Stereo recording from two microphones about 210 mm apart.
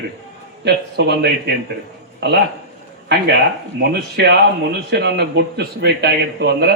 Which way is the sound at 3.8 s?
50° right (ahead or behind).